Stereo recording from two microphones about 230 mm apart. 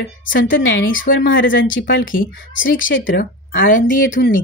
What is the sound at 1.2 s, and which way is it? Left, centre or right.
Speech, left.